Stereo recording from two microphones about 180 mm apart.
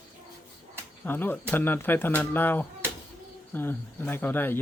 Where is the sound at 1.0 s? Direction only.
10° left (ahead or behind).